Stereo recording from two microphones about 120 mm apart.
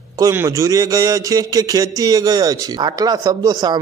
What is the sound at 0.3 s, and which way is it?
A man's voice, 25° right (ahead or behind).